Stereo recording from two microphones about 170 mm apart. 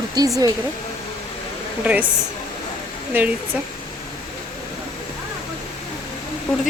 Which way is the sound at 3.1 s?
10° right (ahead or behind).